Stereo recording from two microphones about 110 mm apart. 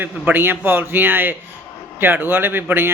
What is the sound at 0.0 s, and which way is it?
A man's voice, 20° right (ahead or behind).